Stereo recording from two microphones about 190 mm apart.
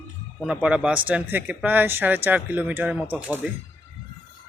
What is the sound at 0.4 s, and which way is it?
Speech, 5° right (ahead or behind).